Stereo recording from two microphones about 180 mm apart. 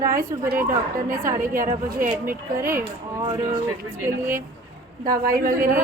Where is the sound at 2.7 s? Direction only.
20° right (ahead or behind).